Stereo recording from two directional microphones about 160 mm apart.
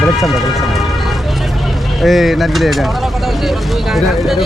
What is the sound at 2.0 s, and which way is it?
Speech, centre (ahead or behind).